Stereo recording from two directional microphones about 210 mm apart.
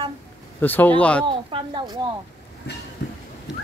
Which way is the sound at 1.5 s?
20° right (ahead or behind).